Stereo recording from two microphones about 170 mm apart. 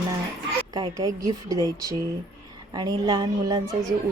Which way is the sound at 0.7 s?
20° right (ahead or behind).